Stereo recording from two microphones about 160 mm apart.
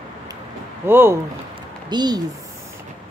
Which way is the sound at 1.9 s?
25° right (ahead or behind).